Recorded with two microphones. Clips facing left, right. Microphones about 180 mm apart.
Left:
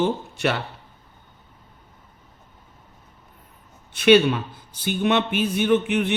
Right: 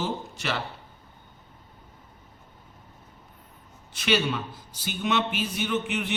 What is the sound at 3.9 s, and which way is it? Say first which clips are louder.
Speech: left 10 dB; 60° left (ahead or behind).